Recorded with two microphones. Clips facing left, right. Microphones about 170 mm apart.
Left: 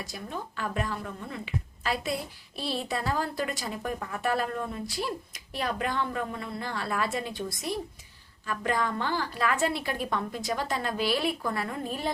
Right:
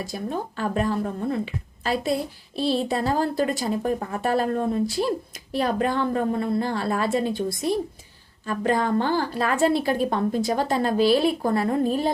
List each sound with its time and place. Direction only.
0.0 s a woman's voice: 35° right (ahead or behind)